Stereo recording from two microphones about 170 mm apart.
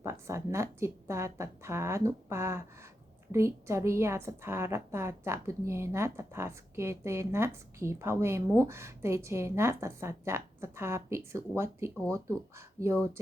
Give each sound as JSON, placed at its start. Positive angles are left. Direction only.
{"t": 0.0, "sound": "a woman's voice", "side_deg": -15}